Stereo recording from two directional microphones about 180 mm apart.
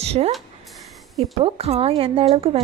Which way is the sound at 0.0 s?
35° right (ahead or behind).